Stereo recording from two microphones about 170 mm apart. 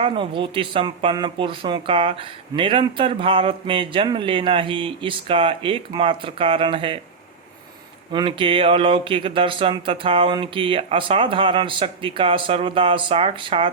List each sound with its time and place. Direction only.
0.0 s speech: 30° right (ahead or behind)
8.1 s speech: 30° right (ahead or behind)